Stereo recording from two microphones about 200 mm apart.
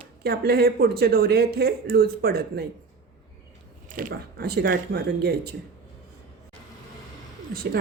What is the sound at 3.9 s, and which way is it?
Speech, 50° right (ahead or behind).